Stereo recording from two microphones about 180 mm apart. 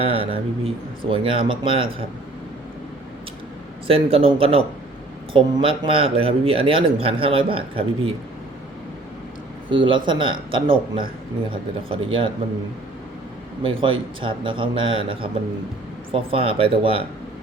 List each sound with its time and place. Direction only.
0.0 s a man's voice: 30° right (ahead or behind)
3.8 s a man's voice: 30° right (ahead or behind)
9.6 s a man's voice: 30° right (ahead or behind)
13.6 s a man's voice: 30° right (ahead or behind)